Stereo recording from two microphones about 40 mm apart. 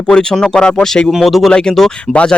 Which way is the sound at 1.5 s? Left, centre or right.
Centre.